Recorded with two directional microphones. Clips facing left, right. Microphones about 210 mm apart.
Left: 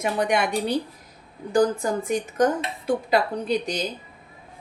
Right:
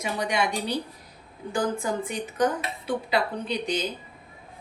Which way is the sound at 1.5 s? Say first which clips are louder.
Left 6 dB; 40° left (ahead or behind).